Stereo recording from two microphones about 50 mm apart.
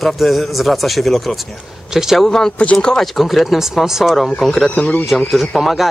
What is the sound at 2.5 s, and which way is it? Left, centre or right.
Speech, left.